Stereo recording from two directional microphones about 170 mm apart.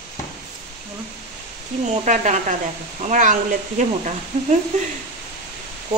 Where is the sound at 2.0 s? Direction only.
45° right (ahead or behind).